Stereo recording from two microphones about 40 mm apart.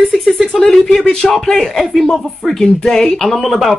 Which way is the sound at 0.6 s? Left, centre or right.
Centre.